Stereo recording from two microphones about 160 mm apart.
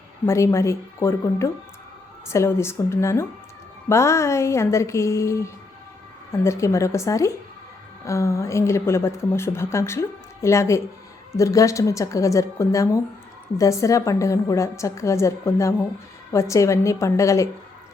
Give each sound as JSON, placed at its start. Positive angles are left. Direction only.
{"t": 0.3, "sound": "a woman's voice", "side_deg": 20}